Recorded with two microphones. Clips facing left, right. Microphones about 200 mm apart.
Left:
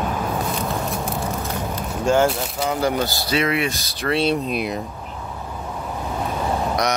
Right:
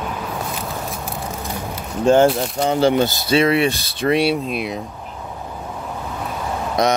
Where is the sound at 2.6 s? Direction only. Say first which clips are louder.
Right 5 dB; 30° right (ahead or behind).